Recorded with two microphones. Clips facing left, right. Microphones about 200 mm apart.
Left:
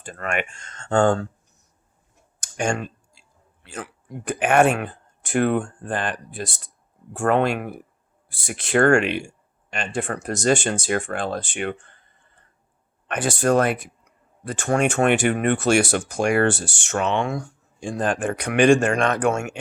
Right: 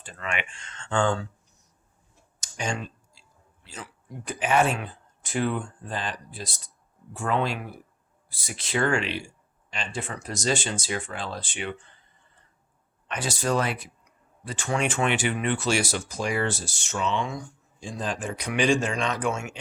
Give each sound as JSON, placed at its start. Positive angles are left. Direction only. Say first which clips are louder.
{"t": 0.0, "sound": "speech", "louder": "left 6 dB", "side_deg": 50}
{"t": 2.4, "sound": "clicking", "louder": "left 7 dB", "side_deg": 55}
{"t": 3.6, "sound": "a man's voice", "louder": "left 7 dB", "side_deg": 60}
{"t": 13.1, "sound": "speech", "louder": "left 7 dB", "side_deg": 55}